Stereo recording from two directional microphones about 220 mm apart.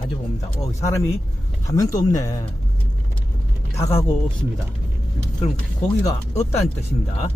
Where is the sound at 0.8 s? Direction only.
15° left (ahead or behind).